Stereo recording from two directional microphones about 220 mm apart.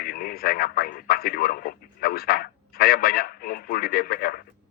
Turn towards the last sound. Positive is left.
turn(degrees=40)  # may be behind; listen again after turning